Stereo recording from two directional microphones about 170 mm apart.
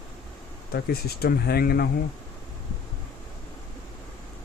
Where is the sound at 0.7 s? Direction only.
65° left (ahead or behind).